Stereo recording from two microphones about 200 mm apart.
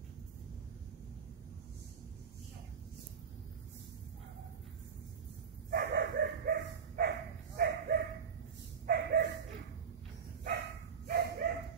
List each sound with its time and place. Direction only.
5.7 s dog: 55° right (ahead or behind)
11.1 s bow-wow: 50° right (ahead or behind)